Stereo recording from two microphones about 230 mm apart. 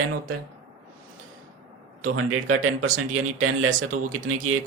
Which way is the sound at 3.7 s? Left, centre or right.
Right.